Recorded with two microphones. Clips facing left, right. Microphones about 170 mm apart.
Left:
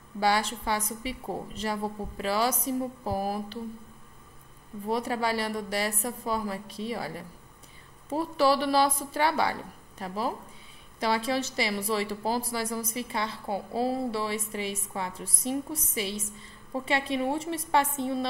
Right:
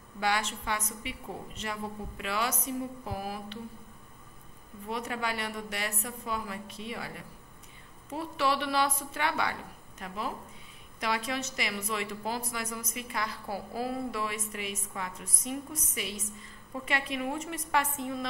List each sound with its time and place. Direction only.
0.2 s a woman's voice: 35° left (ahead or behind)
4.8 s a woman's voice: 35° left (ahead or behind)